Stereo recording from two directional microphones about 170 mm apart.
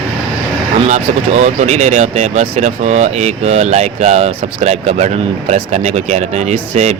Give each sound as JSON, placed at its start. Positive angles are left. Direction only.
{"t": 0.9, "sound": "speech", "side_deg": -45}